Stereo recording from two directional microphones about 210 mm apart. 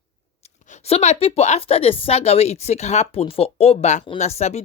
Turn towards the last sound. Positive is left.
turn(degrees=30)  # may be behind; listen again after turning